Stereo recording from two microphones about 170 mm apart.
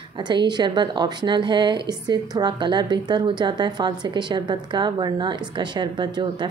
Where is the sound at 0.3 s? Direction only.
25° right (ahead or behind).